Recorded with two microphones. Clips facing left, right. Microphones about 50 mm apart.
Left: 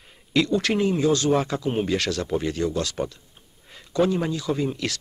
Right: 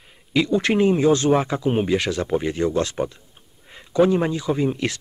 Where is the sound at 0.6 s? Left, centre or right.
Right.